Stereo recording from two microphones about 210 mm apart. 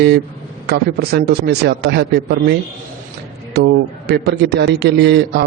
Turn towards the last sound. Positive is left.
turn(degrees=-55)  # may be behind; listen again after turning